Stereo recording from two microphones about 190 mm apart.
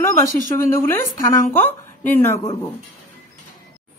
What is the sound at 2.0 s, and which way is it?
Speech, 10° left (ahead or behind).